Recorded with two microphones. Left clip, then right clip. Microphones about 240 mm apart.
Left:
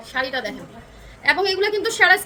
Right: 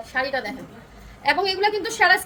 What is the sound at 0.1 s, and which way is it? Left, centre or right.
A woman's voice, centre.